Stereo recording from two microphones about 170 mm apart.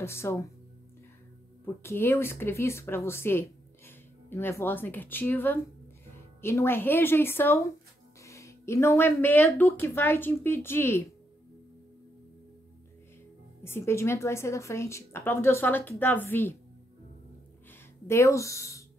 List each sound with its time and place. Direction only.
0.0 s speech: 15° left (ahead or behind)
1.8 s speech: 15° left (ahead or behind)
13.7 s speech: 15° left (ahead or behind)
18.0 s speech: 15° left (ahead or behind)